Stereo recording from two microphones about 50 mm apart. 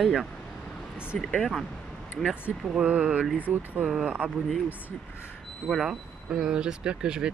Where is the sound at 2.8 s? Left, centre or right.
Right.